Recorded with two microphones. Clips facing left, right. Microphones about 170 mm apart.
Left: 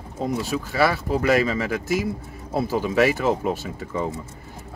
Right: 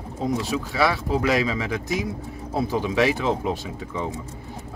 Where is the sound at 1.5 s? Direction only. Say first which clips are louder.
Left 2 dB; 5° left (ahead or behind).